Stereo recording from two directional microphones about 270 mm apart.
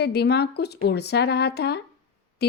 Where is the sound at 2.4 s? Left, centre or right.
Left.